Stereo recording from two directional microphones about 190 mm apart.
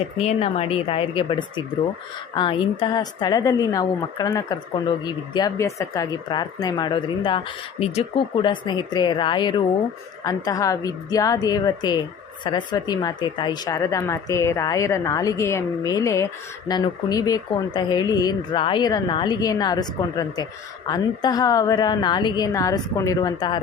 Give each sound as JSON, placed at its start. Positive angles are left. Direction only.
{"t": 0.2, "sound": "speech", "side_deg": 30}